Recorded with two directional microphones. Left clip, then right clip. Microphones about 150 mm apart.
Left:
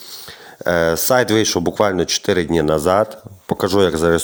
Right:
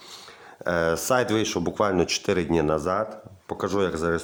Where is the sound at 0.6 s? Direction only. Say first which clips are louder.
Left 7 dB; 35° left (ahead or behind).